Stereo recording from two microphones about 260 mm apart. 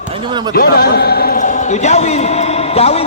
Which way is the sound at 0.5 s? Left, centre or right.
Left.